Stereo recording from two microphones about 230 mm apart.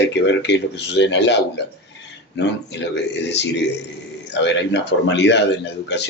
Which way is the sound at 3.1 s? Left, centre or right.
Left.